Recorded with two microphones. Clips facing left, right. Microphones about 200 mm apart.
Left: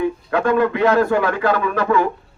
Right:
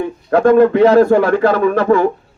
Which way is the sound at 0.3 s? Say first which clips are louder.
Right 9 dB; 40° right (ahead or behind).